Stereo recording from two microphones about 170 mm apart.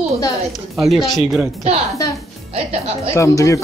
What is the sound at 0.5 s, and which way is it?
Speech, centre (ahead or behind).